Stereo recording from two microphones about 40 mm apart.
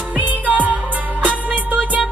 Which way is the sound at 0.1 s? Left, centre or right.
Right.